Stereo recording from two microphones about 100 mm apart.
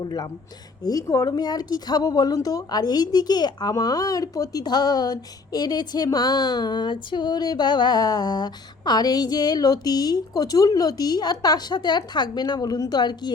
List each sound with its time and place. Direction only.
0.0 s speech: 40° left (ahead or behind)